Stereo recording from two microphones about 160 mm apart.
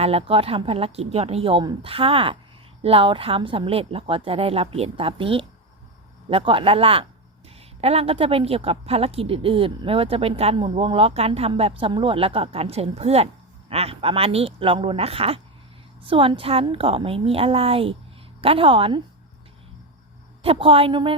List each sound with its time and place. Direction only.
0.0 s a woman's voice: 35° right (ahead or behind)
20.4 s a woman's voice: 35° right (ahead or behind)